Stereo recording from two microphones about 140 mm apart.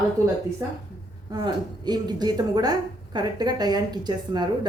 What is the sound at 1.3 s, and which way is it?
A woman's voice, 30° right (ahead or behind).